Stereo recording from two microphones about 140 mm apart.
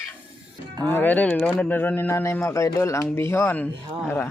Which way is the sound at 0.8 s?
15° left (ahead or behind).